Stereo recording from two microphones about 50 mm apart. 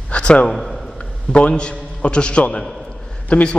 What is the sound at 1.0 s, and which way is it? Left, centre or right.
A man's voice, left.